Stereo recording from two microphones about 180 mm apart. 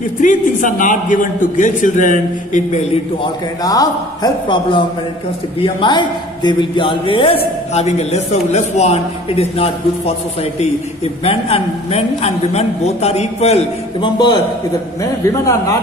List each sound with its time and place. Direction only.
0.2 s a man's voice: 45° left (ahead or behind)
3.6 s a man's voice: 20° left (ahead or behind)